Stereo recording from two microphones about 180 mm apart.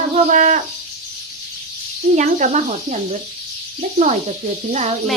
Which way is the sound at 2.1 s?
40° right (ahead or behind).